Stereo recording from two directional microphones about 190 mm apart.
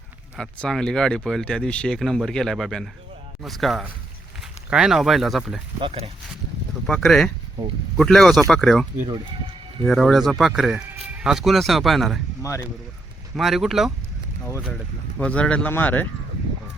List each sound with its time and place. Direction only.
0.3 s speech: 5° left (ahead or behind)
5.8 s speech: 30° right (ahead or behind)
6.8 s speech: centre (ahead or behind)
7.6 s speech: 20° right (ahead or behind)
7.9 s speech: centre (ahead or behind)
12.4 s speech: 15° left (ahead or behind)
13.3 s speech: centre (ahead or behind)
15.2 s speech: 5° left (ahead or behind)